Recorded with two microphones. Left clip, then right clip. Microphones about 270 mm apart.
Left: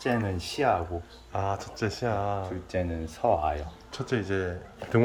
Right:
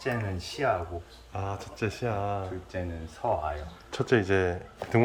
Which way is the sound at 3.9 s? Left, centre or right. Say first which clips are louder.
Right 5 dB; centre.